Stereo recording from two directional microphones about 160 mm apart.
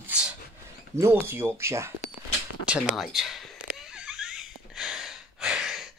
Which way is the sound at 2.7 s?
Centre (ahead or behind).